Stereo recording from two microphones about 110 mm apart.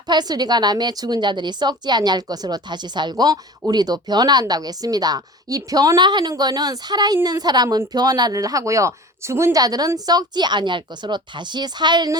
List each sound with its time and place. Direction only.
0.1 s speech: 40° right (ahead or behind)